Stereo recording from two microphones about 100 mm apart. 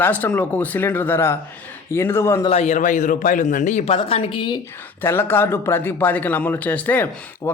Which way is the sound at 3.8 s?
75° left (ahead or behind).